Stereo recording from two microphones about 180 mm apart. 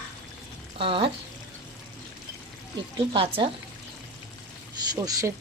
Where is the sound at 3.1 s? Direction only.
30° right (ahead or behind).